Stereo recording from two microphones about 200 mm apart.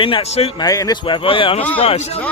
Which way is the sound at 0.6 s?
15° left (ahead or behind).